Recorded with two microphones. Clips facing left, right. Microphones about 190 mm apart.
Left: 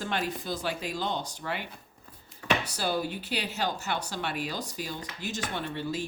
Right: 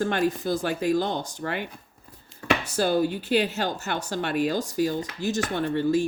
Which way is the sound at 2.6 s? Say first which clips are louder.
Right 8 dB; 50° right (ahead or behind).